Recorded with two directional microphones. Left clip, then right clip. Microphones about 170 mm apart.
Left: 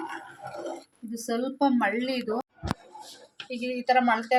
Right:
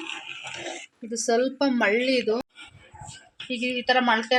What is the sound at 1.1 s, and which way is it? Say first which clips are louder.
Speech: right 7 dB; 60° right (ahead or behind).